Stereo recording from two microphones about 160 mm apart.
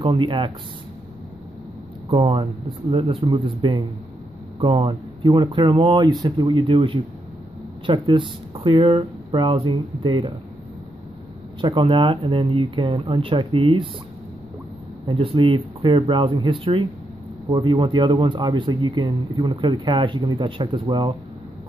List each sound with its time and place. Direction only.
0.0 s speech: 30° right (ahead or behind)
2.0 s speech: 30° right (ahead or behind)
11.6 s speech: 30° right (ahead or behind)
15.0 s speech: 30° right (ahead or behind)